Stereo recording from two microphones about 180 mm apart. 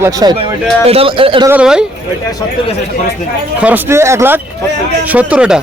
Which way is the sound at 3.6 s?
10° right (ahead or behind).